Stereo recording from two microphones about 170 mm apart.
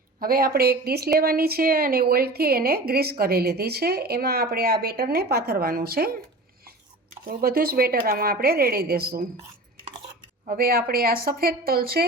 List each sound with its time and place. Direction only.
0.2 s a woman's voice: 60° right (ahead or behind)
7.3 s a woman's voice: 60° right (ahead or behind)
10.4 s a woman's voice: 55° right (ahead or behind)